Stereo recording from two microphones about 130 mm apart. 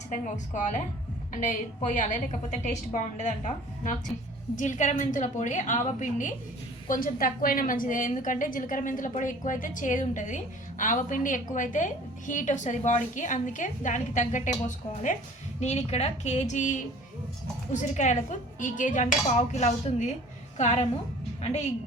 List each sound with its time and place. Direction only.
0.1 s a woman's voice: 70° left (ahead or behind)
6.8 s a woman's voice: 90° left; by 14.6 s 70° left (ahead or behind)
15.6 s a woman's voice: 55° left (ahead or behind)